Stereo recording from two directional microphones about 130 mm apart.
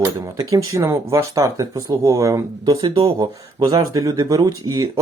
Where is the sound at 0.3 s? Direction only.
25° right (ahead or behind).